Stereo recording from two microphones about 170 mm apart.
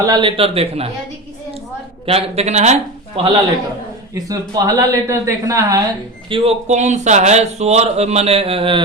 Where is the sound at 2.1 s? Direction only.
35° right (ahead or behind).